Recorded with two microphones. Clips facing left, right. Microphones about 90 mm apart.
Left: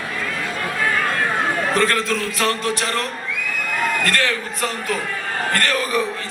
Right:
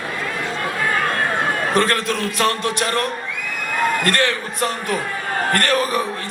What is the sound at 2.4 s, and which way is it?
Speech, 30° right (ahead or behind).